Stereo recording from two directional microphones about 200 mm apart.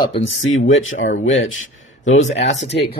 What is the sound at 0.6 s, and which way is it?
Speech, 80° left.